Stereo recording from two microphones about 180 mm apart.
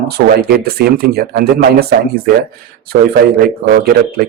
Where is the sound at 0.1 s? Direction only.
60° right (ahead or behind).